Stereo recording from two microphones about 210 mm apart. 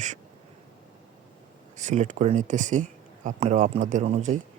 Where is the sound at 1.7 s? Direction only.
35° right (ahead or behind).